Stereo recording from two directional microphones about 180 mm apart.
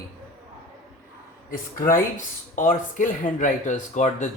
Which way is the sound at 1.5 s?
50° left (ahead or behind).